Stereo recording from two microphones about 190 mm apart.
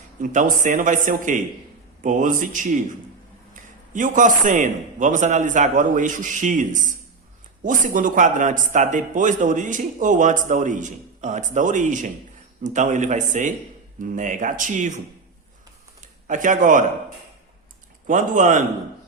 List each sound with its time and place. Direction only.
0.2 s a man's voice: 45° right (ahead or behind)
16.2 s a man's voice: 40° right (ahead or behind)
18.0 s a man's voice: 45° right (ahead or behind)